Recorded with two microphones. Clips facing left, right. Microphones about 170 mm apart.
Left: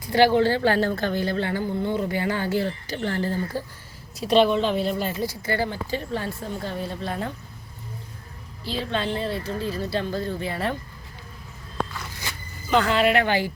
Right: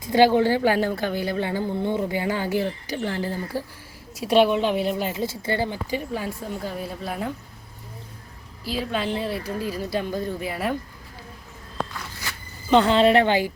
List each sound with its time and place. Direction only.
0.0 s a woman's voice: 15° right (ahead or behind)
8.6 s a woman's voice: 5° right (ahead or behind)
12.7 s speech: 30° right (ahead or behind)